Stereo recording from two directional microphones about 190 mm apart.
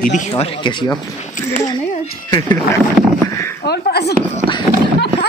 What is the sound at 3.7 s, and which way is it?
Speech, 60° left (ahead or behind).